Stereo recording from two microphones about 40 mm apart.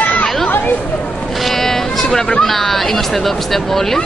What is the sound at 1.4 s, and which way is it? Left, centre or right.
Music, centre.